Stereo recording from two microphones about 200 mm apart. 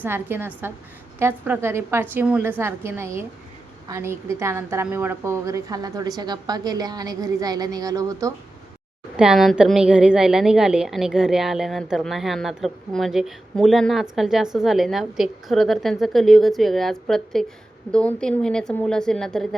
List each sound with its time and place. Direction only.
0.0 s a woman's voice: 10° right (ahead or behind)
9.1 s a woman's voice: 5° right (ahead or behind)